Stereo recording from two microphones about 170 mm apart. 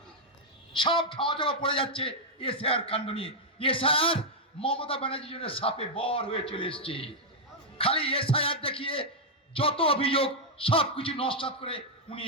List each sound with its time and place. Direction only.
0.7 s a man's voice: 30° left (ahead or behind)